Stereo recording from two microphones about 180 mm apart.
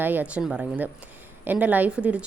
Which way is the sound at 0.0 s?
10° right (ahead or behind).